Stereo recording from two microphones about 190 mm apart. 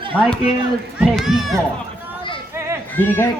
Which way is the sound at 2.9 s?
10° left (ahead or behind).